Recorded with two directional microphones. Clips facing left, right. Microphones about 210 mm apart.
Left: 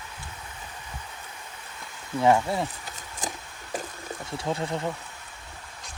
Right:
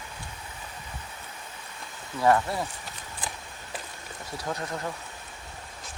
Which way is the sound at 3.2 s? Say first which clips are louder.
Left 4 dB; 45° left (ahead or behind).